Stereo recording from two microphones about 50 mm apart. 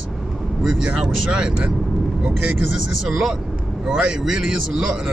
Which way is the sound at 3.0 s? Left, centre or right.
Centre.